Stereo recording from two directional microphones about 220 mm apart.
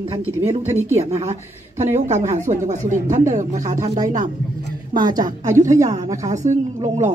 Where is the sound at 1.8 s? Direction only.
30° right (ahead or behind).